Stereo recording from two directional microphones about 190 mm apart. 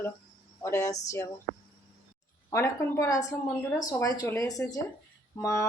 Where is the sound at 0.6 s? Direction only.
15° left (ahead or behind).